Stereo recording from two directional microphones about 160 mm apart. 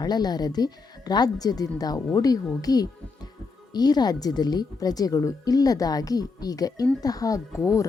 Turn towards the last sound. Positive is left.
turn(degrees=20)  # may be behind; listen again after turning